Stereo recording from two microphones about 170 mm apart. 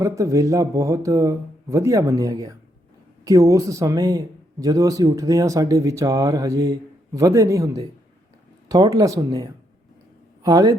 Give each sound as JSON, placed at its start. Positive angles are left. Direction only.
{"t": 0.0, "sound": "speech", "side_deg": -20}